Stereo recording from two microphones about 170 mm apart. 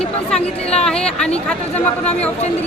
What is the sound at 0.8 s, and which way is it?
Speech, 5° left (ahead or behind).